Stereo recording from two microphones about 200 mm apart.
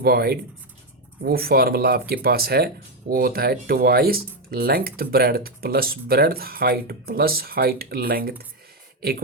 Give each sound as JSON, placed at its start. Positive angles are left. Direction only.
{"t": 0.0, "sound": "speech", "side_deg": -50}